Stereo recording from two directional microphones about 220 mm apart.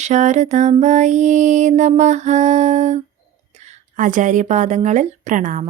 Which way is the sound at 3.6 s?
35° right (ahead or behind).